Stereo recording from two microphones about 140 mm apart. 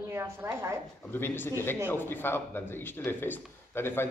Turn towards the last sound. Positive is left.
turn(degrees=15)  # may be behind; listen again after turning